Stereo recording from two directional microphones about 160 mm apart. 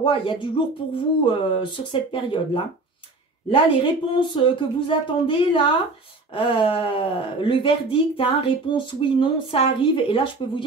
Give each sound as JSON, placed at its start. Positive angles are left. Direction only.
{"t": 0.0, "sound": "speech", "side_deg": 30}